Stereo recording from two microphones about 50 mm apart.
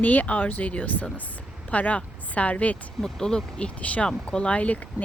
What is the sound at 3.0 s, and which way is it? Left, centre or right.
Speech, centre.